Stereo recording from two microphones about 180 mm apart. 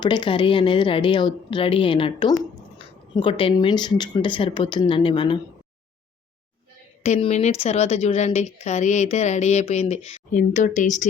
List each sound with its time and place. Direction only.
0.0 s speech: 25° left (ahead or behind)
7.0 s speech: 40° left (ahead or behind)